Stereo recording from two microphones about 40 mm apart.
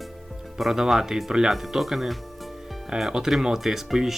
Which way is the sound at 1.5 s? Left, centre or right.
Centre.